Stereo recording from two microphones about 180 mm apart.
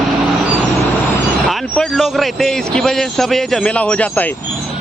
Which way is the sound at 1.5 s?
Centre (ahead or behind).